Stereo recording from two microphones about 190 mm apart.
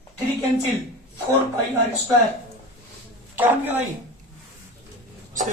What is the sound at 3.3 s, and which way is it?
Speech, 10° right (ahead or behind).